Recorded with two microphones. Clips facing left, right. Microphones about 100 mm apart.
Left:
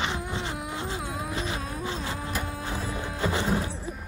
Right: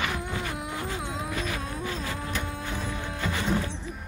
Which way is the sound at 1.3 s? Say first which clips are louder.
Even; 25° left (ahead or behind).